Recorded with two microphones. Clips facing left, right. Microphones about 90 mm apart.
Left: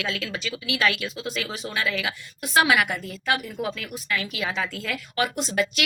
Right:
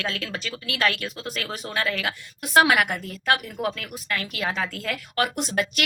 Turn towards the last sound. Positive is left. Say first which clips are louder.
# even
turn(degrees=-50)  # may be behind; listen again after turning